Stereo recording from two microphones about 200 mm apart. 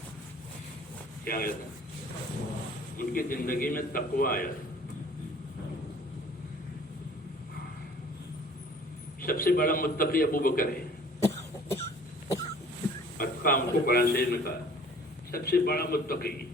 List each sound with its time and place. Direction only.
1.2 s speech: 45° left (ahead or behind)
3.0 s a man's voice: 45° left (ahead or behind)
9.2 s a man's voice: 45° left (ahead or behind)
11.2 s cough: 15° left (ahead or behind)
13.1 s a man's voice: 45° left (ahead or behind)